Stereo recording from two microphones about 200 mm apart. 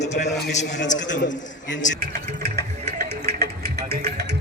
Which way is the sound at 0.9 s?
65° left (ahead or behind).